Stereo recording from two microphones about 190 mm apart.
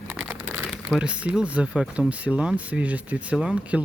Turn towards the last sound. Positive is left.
turn(degrees=-5)  # may be behind; listen again after turning